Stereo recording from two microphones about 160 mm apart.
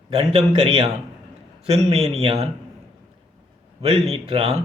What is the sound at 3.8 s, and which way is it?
Speech, 40° right (ahead or behind).